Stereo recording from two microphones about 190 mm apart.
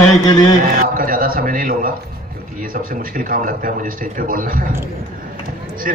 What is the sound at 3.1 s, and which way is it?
A man's voice, 45° right (ahead or behind).